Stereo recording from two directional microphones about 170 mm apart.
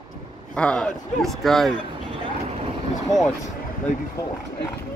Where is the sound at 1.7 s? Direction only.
30° right (ahead or behind).